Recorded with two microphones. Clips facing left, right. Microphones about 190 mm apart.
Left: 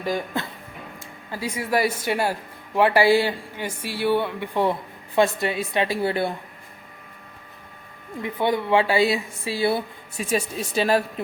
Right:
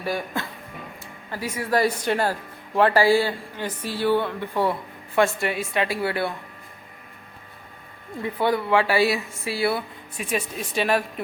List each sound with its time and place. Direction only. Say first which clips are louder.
0.0 s a woman's voice: left 1 dB; 15° left (ahead or behind)
8.2 s a woman's voice: even; 20° left (ahead or behind)